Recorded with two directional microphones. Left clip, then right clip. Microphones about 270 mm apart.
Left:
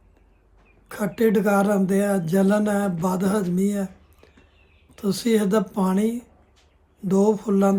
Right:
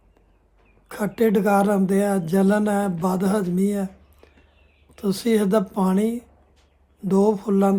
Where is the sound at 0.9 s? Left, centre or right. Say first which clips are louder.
Even; centre.